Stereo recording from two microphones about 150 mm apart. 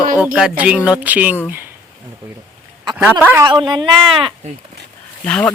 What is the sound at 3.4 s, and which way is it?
Speech, 30° right (ahead or behind).